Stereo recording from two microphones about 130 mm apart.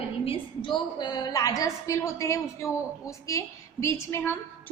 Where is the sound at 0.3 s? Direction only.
40° left (ahead or behind).